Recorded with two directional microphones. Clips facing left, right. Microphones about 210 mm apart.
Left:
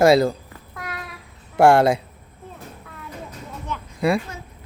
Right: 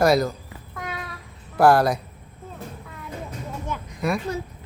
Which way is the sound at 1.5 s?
25° left (ahead or behind).